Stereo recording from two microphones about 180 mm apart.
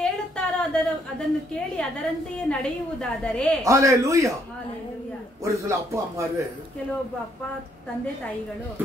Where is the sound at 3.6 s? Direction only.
15° right (ahead or behind).